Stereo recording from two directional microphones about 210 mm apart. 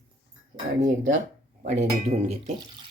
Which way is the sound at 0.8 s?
35° right (ahead or behind).